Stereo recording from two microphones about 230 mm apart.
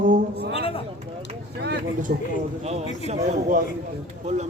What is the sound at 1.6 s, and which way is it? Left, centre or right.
Speech, right.